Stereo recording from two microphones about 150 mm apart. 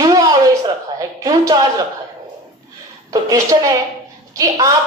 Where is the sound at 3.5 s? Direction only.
30° right (ahead or behind).